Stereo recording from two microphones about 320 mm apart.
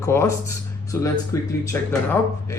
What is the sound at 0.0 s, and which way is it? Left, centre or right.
Speech, centre.